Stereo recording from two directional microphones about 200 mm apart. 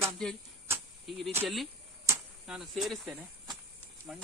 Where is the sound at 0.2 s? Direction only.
Centre (ahead or behind).